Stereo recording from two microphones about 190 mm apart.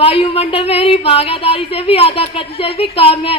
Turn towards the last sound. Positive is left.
turn(degrees=30)  # may be behind; listen again after turning